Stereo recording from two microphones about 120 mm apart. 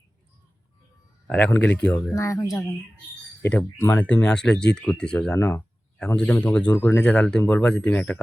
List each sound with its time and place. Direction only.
1.5 s speech: 15° left (ahead or behind)
2.1 s speech: 25° left (ahead or behind); by 5.4 s 10° left (ahead or behind)
5.4 s speech: 25° left (ahead or behind)
6.1 s speech: 10° left (ahead or behind)